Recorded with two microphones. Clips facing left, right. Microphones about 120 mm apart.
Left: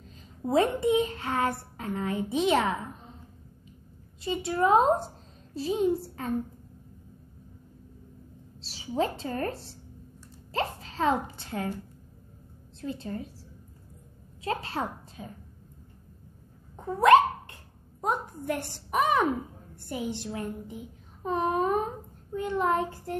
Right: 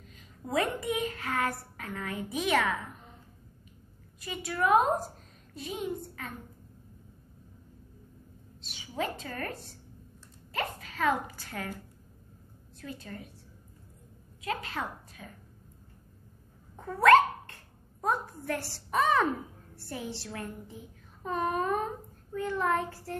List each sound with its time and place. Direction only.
0.4 s a child's voice: 30° left (ahead or behind)
4.2 s a woman's voice: 25° left (ahead or behind)
8.5 s a woman's voice: 30° left (ahead or behind)
12.8 s a child's voice: 25° left (ahead or behind)
14.4 s a woman's voice: 30° left (ahead or behind)
16.7 s dog: 20° left (ahead or behind)
18.0 s a woman's voice: 20° left (ahead or behind)